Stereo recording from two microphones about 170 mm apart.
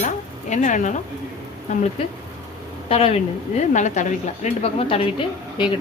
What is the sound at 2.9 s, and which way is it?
A woman's voice, 35° left (ahead or behind).